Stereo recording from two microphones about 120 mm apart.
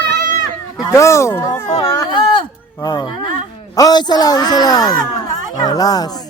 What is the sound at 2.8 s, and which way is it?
Speech, 30° left (ahead or behind).